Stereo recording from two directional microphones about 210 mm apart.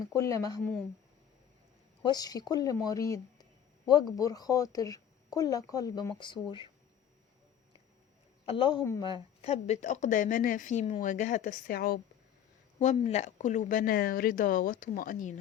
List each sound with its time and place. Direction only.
0.2 s speech: 15° left (ahead or behind)
2.0 s speech: 20° left (ahead or behind)
8.4 s a woman's voice: 25° left (ahead or behind); by 11.9 s 45° left (ahead or behind)
12.8 s a woman's voice: 35° left (ahead or behind)